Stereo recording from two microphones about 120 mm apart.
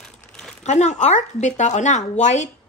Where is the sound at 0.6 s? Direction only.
75° left (ahead or behind).